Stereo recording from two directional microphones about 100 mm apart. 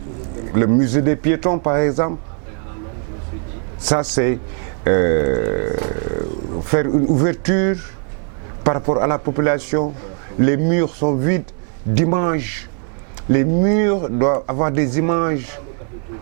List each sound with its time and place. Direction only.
0.5 s speech: 15° right (ahead or behind)
3.8 s speech: 10° right (ahead or behind)